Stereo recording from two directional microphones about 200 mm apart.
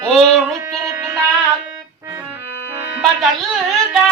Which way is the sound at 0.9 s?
15° right (ahead or behind).